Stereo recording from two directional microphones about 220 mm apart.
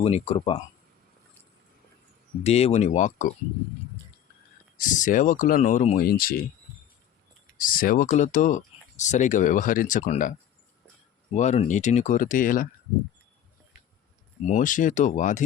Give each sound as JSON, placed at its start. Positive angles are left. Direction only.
{"t": 0.0, "sound": "speech", "side_deg": 25}
{"t": 2.4, "sound": "speech", "side_deg": 30}
{"t": 4.8, "sound": "speech", "side_deg": 35}
{"t": 7.6, "sound": "speech", "side_deg": 40}
{"t": 11.3, "sound": "speech", "side_deg": 30}
{"t": 14.4, "sound": "speech", "side_deg": 35}